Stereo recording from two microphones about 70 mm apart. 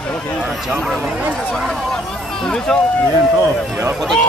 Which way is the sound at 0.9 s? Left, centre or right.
Right.